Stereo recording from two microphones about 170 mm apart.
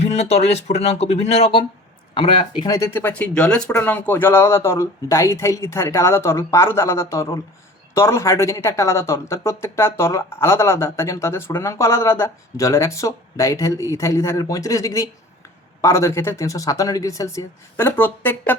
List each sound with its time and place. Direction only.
0.0 s speech: 40° left (ahead or behind)
2.6 s speech: 15° left (ahead or behind)